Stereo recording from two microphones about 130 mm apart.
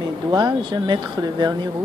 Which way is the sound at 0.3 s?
35° right (ahead or behind).